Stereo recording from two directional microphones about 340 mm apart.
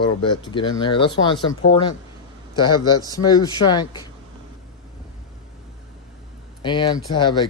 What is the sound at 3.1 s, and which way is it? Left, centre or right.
Speech, centre.